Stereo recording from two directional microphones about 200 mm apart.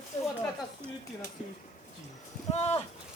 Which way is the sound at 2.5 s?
35° left (ahead or behind).